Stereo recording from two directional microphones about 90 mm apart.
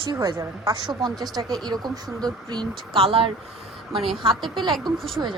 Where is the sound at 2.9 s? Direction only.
90° right.